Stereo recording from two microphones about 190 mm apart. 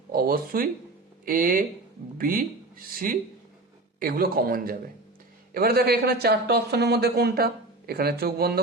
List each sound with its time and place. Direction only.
0.1 s speech: 50° right (ahead or behind)